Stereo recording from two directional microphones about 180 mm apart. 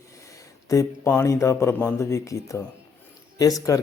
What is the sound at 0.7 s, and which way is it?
Speech, 15° left (ahead or behind).